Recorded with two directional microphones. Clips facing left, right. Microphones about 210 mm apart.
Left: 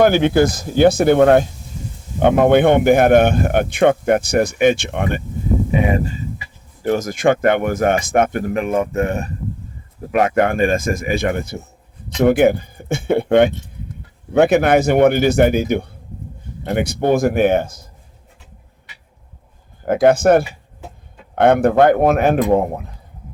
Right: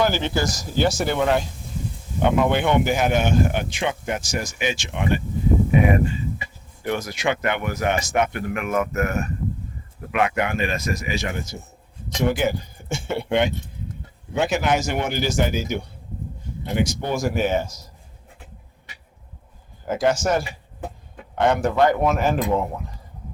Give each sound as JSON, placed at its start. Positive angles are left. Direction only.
{"t": 0.0, "sound": "a man's voice", "side_deg": 55}
{"t": 6.8, "sound": "speech", "side_deg": 40}
{"t": 10.1, "sound": "a man's voice", "side_deg": 45}
{"t": 19.8, "sound": "a man's voice", "side_deg": 60}